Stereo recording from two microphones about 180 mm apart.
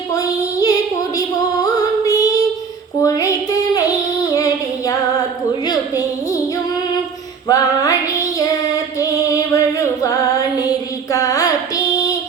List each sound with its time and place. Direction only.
0.1 s female singing: 20° left (ahead or behind)
3.0 s child singing: 20° left (ahead or behind)
7.4 s female singing: 20° left (ahead or behind)